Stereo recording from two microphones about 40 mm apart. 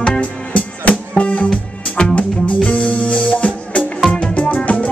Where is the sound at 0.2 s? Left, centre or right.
Left.